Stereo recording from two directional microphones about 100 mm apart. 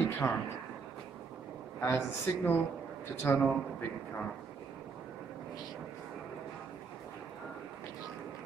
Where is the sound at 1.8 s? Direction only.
25° left (ahead or behind).